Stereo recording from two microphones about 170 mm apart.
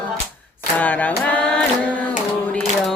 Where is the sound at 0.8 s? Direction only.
10° left (ahead or behind).